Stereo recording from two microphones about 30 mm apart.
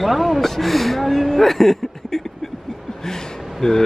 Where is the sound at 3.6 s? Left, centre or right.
Centre.